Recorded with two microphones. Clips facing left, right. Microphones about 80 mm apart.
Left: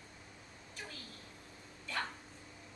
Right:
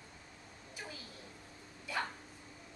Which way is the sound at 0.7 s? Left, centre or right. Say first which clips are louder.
Right 1 dB; centre.